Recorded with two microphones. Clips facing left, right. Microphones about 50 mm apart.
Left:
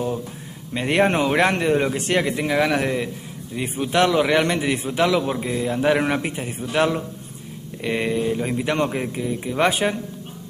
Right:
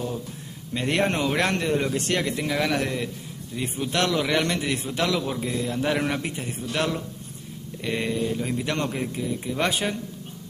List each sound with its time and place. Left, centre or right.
0.7 s a man's voice: centre